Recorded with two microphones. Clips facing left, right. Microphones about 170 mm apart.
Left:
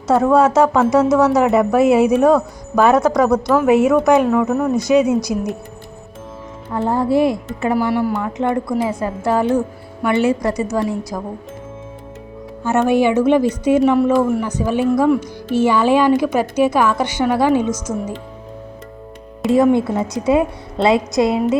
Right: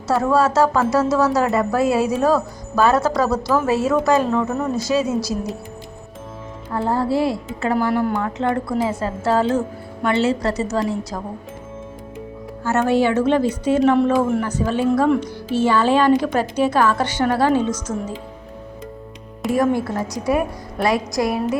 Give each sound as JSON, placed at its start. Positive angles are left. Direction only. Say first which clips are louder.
{"t": 0.1, "sound": "a woman's voice", "louder": "left 4 dB", "side_deg": 20}
{"t": 4.3, "sound": "speech", "louder": "left 4 dB", "side_deg": 10}
{"t": 4.8, "sound": "a woman's voice", "louder": "left 6 dB", "side_deg": 20}
{"t": 6.7, "sound": "speech", "louder": "left 3 dB", "side_deg": 20}
{"t": 7.8, "sound": "speech", "louder": "even", "side_deg": 5}
{"t": 12.6, "sound": "speech", "louder": "left 3 dB", "side_deg": 15}
{"t": 19.5, "sound": "a woman's voice", "louder": "left 5 dB", "side_deg": 25}